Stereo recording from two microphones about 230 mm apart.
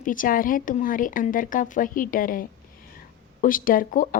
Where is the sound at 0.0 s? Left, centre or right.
Left.